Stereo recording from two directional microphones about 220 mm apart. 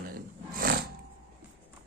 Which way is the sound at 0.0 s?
40° right (ahead or behind).